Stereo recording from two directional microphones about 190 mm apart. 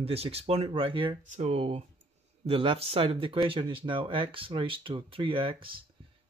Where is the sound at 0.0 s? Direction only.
30° right (ahead or behind).